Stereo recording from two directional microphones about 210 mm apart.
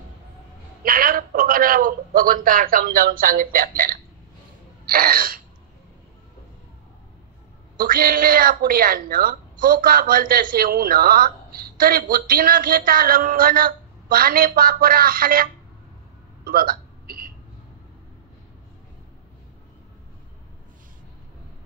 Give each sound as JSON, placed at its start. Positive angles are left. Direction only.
{"t": 0.8, "sound": "a man's voice", "side_deg": -45}
{"t": 4.8, "sound": "throat clearing", "side_deg": -45}
{"t": 7.7, "sound": "a woman's voice", "side_deg": -45}
{"t": 16.4, "sound": "hiccup", "side_deg": -45}